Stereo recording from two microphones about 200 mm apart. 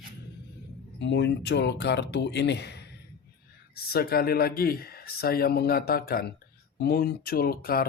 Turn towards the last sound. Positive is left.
turn(degrees=50)  # may be behind; listen again after turning